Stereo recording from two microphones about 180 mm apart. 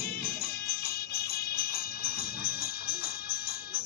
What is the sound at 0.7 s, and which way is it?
Music, 60° left (ahead or behind).